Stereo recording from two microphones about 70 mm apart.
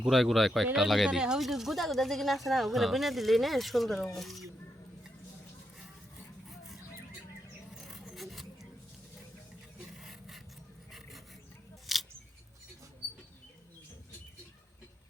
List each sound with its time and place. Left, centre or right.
0.0 s speech: centre
7.9 s a sound: centre
10.0 s vehicle: centre
11.9 s scissors: centre